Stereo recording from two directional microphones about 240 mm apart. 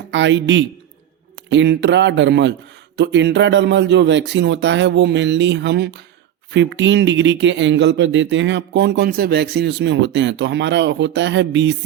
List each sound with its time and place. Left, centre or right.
0.1 s speech: right